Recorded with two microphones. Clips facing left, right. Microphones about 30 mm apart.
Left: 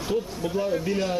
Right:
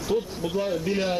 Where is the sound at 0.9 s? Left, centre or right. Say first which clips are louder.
Even; centre.